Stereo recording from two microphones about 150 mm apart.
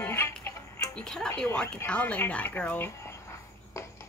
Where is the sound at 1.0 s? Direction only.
5° left (ahead or behind).